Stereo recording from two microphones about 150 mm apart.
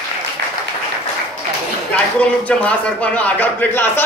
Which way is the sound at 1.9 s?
10° left (ahead or behind).